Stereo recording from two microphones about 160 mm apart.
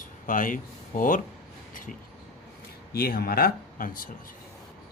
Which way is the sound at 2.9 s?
70° left (ahead or behind).